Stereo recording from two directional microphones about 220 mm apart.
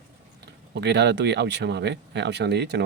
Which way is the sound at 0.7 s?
50° right (ahead or behind).